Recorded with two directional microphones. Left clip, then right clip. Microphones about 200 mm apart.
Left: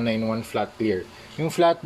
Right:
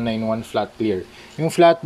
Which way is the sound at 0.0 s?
20° right (ahead or behind).